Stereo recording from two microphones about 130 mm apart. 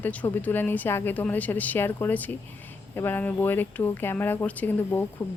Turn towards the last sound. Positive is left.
turn(degrees=15)  # may be behind; listen again after turning